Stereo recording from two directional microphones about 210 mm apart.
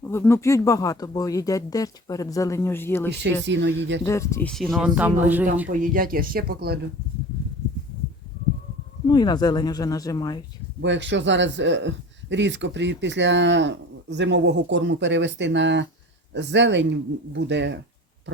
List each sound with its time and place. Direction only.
0.0 s speech: 10° left (ahead or behind)
3.4 s a man's voice: 55° right (ahead or behind)
4.0 s speech: 15° left (ahead or behind); by 5.5 s 10° right (ahead or behind)
5.8 s speech: 40° right (ahead or behind)
9.0 s speech: 20° left (ahead or behind)
10.8 s a man's voice: 60° right (ahead or behind)